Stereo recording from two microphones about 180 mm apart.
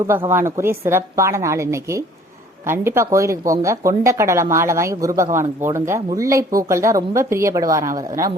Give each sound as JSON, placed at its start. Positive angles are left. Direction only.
{"t": 0.3, "sound": "speech", "side_deg": -15}